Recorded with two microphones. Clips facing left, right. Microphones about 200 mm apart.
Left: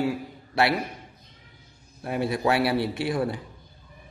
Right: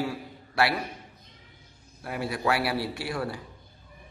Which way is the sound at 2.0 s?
25° left (ahead or behind).